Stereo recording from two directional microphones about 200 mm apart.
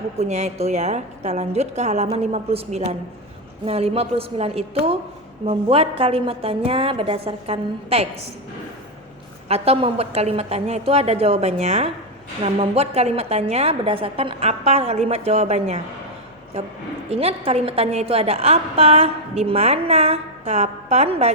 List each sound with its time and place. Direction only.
0.2 s a woman's voice: 35° right (ahead or behind)
9.5 s a woman's voice: 30° right (ahead or behind)
17.1 s a woman's voice: 30° right (ahead or behind)